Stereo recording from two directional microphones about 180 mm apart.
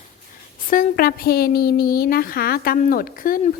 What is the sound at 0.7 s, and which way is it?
A woman's voice, 55° left (ahead or behind).